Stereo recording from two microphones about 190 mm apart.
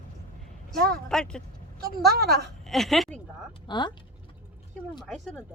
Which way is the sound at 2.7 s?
Centre (ahead or behind).